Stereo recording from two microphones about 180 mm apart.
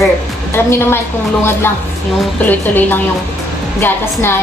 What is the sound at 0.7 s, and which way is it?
Speech, 15° left (ahead or behind).